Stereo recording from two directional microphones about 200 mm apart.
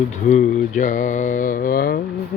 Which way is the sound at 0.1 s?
35° left (ahead or behind).